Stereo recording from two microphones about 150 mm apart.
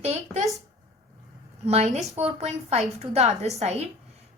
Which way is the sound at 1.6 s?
45° right (ahead or behind).